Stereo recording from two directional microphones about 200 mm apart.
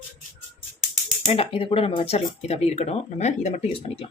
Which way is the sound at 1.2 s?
30° left (ahead or behind).